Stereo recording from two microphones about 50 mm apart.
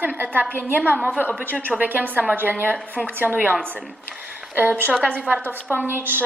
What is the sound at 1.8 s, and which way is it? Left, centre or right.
Speech, right.